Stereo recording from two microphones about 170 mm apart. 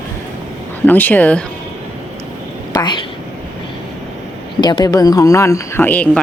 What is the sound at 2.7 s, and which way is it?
Speech, 25° left (ahead or behind).